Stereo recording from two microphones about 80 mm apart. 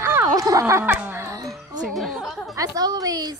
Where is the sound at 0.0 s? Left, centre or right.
Right.